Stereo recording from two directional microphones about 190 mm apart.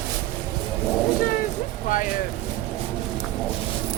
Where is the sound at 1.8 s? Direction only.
45° left (ahead or behind).